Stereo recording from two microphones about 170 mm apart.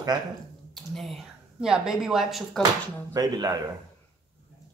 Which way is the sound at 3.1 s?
20° right (ahead or behind).